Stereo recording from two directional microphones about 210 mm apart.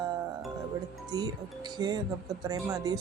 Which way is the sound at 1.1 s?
15° right (ahead or behind).